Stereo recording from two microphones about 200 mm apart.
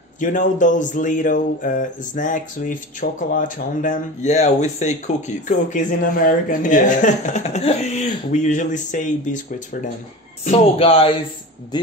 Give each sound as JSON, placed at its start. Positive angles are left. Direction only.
{"t": 0.2, "sound": "speech", "side_deg": 40}